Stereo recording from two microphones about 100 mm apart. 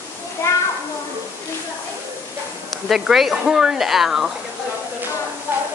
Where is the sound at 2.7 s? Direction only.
5° right (ahead or behind).